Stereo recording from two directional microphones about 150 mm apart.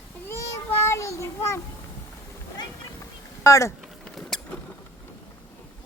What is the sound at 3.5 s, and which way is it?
Speech, 20° left (ahead or behind).